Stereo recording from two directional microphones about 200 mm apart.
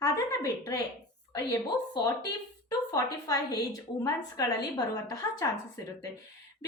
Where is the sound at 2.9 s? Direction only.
20° left (ahead or behind).